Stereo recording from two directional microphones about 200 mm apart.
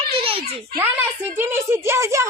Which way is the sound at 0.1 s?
30° right (ahead or behind).